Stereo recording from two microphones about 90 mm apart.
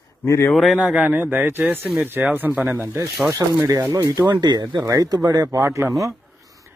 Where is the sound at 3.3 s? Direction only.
40° right (ahead or behind).